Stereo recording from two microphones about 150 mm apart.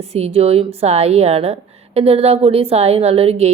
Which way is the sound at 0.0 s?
45° right (ahead or behind).